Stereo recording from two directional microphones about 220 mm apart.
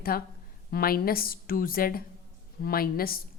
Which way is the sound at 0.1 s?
40° left (ahead or behind).